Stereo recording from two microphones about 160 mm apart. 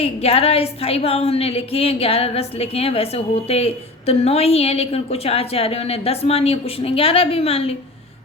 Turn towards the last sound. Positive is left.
turn(degrees=40)  # may be behind; listen again after turning